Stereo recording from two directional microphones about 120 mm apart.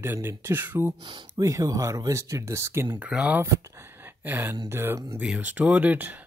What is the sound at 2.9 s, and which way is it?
Speech, 10° right (ahead or behind).